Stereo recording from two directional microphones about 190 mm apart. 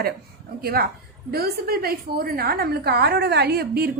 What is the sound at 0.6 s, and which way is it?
A woman's voice, 55° right (ahead or behind).